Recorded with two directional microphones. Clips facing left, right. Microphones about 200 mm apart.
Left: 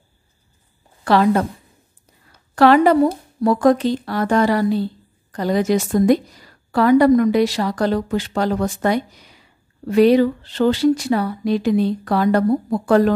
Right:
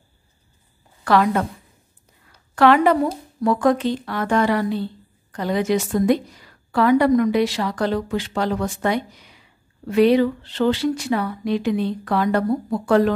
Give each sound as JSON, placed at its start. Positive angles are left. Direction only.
{"t": 1.0, "sound": "a woman's voice", "side_deg": 30}
{"t": 2.5, "sound": "a woman's voice", "side_deg": 35}